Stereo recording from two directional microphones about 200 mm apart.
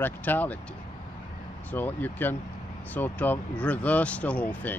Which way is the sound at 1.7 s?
10° left (ahead or behind).